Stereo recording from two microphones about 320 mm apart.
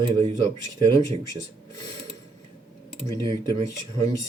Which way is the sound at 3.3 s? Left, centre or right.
Centre.